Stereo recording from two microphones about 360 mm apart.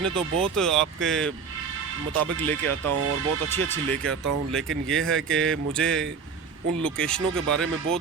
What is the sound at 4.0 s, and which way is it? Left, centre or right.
Speech, right.